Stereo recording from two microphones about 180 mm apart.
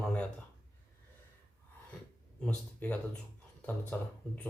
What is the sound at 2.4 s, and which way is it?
Speech, 10° left (ahead or behind).